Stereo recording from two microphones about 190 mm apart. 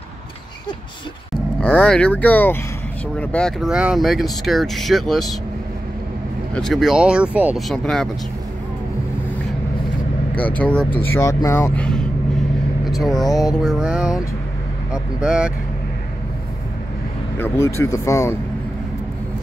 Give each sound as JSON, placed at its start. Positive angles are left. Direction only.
{"t": 1.6, "sound": "speech", "side_deg": 5}
{"t": 6.5, "sound": "speech", "side_deg": 0}
{"t": 10.3, "sound": "speech", "side_deg": 5}
{"t": 13.3, "sound": "mantra", "side_deg": 20}
{"t": 13.6, "sound": "speech", "side_deg": -5}
{"t": 17.4, "sound": "speech", "side_deg": 15}